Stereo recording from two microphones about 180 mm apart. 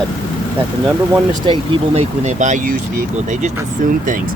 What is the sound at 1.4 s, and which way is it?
Speech, 30° right (ahead or behind).